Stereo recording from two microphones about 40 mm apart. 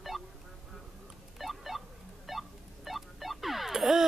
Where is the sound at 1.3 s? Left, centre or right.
Centre.